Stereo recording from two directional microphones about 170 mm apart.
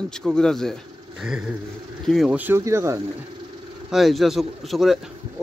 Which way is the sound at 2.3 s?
10° right (ahead or behind).